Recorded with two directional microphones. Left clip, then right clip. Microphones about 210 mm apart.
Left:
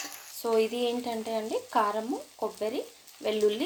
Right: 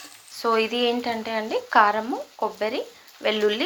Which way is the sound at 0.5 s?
Centre (ahead or behind).